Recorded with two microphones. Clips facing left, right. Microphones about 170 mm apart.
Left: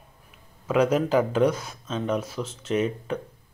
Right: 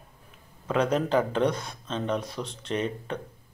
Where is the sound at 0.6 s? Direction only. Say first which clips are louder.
Left 3 dB; 10° left (ahead or behind).